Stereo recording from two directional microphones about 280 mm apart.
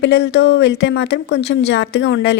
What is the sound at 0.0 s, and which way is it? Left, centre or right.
Speech, left.